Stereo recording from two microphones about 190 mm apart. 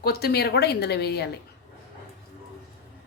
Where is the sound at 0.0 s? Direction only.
55° left (ahead or behind).